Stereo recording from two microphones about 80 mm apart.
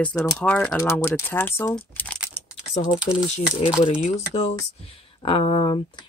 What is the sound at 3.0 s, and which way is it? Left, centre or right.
Speech, centre.